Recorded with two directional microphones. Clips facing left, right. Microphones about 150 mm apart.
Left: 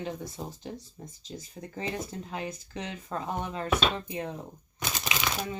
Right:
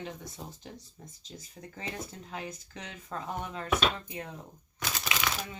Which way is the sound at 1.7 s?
30° left (ahead or behind).